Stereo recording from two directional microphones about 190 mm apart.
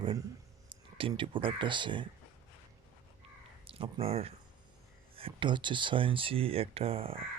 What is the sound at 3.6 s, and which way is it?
Speech, 30° right (ahead or behind).